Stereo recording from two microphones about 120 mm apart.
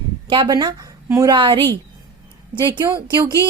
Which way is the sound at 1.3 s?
45° right (ahead or behind).